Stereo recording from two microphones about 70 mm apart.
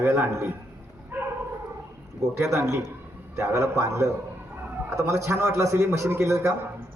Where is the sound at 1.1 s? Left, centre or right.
Right.